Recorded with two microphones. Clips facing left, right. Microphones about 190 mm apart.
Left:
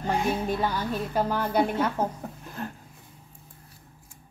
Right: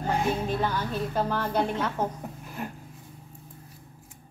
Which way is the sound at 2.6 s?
10° right (ahead or behind).